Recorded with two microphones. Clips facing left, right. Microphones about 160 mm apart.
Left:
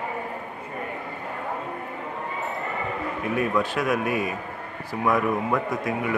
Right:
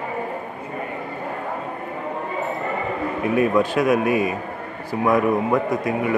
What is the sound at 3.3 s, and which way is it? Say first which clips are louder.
Speech: right 6 dB; 5° right (ahead or behind).